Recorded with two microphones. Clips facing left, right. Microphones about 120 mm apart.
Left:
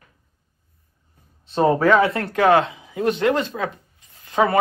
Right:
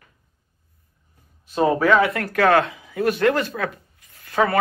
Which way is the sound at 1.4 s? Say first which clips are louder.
Left 1 dB; 30° left (ahead or behind).